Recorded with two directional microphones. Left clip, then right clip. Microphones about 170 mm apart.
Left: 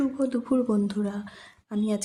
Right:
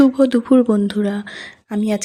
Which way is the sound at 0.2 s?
40° right (ahead or behind).